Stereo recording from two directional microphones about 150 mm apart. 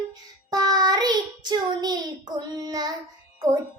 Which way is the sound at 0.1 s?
25° right (ahead or behind).